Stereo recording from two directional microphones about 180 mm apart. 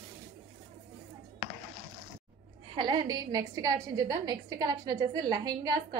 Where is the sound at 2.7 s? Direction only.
25° right (ahead or behind).